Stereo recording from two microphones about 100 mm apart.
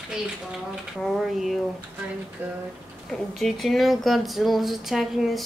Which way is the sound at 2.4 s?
20° right (ahead or behind).